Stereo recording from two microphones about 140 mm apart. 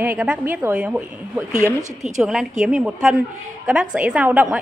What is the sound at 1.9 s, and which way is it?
Speech, 60° right (ahead or behind).